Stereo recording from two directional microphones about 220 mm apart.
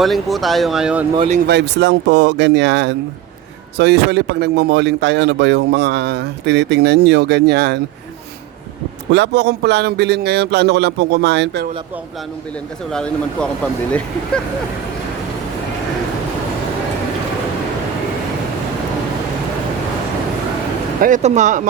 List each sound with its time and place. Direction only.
0.0 s speech: centre (ahead or behind)
1.1 s speech: 25° right (ahead or behind)
1.5 s speech: 50° right (ahead or behind)
9.1 s speech: 50° right (ahead or behind)
12.9 s speech: 5° left (ahead or behind)
21.0 s speech: 35° right (ahead or behind)